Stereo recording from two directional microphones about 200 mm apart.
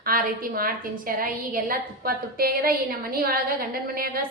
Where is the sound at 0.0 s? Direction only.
45° right (ahead or behind).